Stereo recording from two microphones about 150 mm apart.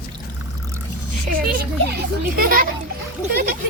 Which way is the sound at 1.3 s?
80° right.